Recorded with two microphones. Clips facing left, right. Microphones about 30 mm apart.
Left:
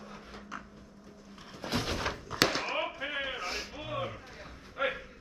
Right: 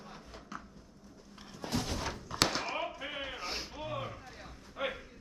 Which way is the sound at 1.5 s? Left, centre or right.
Left.